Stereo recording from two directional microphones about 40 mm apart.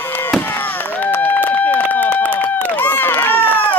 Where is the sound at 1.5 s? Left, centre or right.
Left.